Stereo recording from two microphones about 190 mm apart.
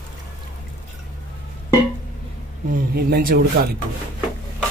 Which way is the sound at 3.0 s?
55° right (ahead or behind).